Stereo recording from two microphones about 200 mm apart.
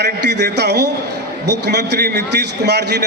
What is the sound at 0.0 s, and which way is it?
A man's voice, 55° right (ahead or behind).